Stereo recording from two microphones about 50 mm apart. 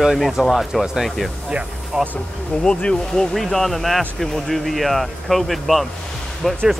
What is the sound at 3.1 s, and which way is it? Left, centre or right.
Speech, centre.